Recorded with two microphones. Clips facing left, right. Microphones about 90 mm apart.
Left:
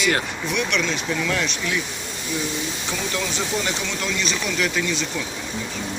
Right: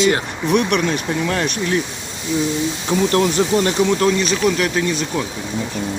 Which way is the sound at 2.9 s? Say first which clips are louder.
Right 13 dB; 50° right (ahead or behind).